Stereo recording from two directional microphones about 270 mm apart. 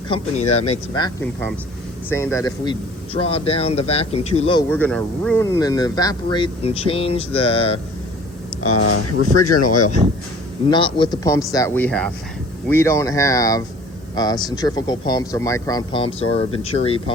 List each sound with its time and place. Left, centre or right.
0.1 s a man's voice: left
1.2 s a man's voice: centre; by 4.6 s left
4.7 s speech: centre; by 7.8 s left
8.6 s speech: left
10.7 s speech: centre